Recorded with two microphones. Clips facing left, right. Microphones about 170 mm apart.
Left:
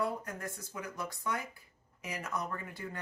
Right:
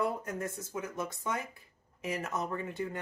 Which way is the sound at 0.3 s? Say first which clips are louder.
Right 5 dB; 20° right (ahead or behind).